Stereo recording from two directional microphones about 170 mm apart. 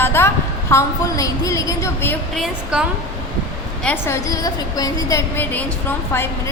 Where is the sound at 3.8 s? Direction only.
5° left (ahead or behind).